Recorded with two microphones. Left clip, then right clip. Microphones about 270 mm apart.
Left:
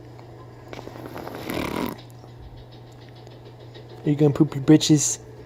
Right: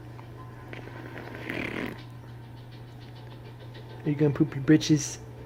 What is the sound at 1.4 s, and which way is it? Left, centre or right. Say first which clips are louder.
Snoring: left 5 dB; left.